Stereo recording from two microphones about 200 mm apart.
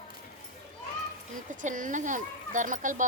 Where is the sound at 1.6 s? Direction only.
40° right (ahead or behind).